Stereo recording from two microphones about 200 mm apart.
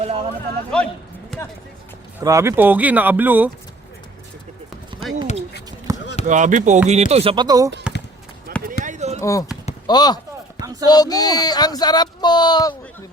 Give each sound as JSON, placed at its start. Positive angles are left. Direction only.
{"t": 0.0, "sound": "speech", "side_deg": -30}
{"t": 0.7, "sound": "speech", "side_deg": 5}
{"t": 2.1, "sound": "speech", "side_deg": -15}
{"t": 5.9, "sound": "basketball bounce", "side_deg": -15}
{"t": 6.2, "sound": "speech", "side_deg": -40}
{"t": 8.5, "sound": "run", "side_deg": -50}
{"t": 8.8, "sound": "a sound", "side_deg": -35}
{"t": 9.8, "sound": "speech", "side_deg": 20}
{"t": 10.6, "sound": "a sound", "side_deg": -20}
{"t": 10.8, "sound": "speech", "side_deg": 20}